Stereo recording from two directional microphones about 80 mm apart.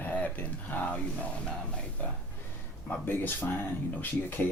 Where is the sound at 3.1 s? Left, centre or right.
Left.